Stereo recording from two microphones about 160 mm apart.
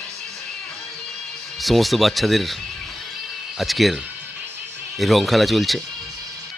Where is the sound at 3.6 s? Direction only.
Centre (ahead or behind).